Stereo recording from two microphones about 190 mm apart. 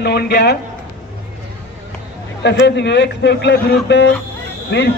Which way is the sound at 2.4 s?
65° left (ahead or behind).